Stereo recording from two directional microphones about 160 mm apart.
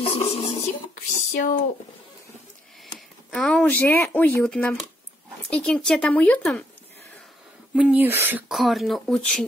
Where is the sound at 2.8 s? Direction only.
Centre (ahead or behind).